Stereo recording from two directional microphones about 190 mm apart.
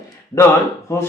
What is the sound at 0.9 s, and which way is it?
Speech, 15° left (ahead or behind).